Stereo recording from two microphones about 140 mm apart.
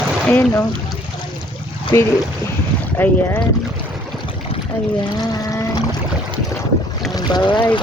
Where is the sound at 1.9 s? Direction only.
20° left (ahead or behind).